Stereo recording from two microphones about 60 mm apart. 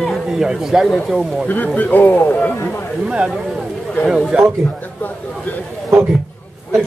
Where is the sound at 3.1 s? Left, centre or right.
Centre.